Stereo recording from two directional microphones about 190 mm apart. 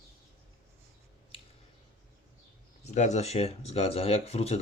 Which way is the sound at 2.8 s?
35° left (ahead or behind).